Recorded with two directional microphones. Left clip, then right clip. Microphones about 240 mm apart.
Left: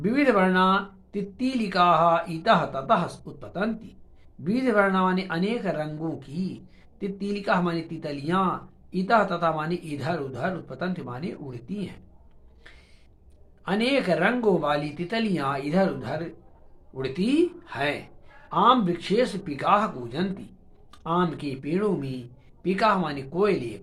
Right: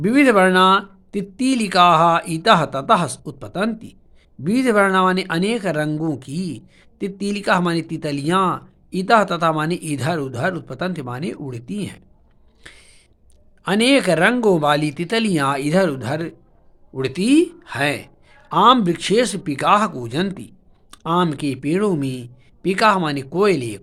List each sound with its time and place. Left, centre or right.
0.0 s speech: right
12.7 s a sound: right
13.7 s speech: right